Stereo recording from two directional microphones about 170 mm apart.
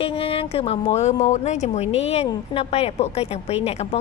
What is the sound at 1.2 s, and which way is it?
A woman's voice, 45° left (ahead or behind).